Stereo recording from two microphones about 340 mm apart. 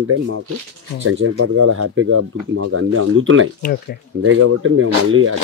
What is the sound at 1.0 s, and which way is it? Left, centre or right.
Speech, right.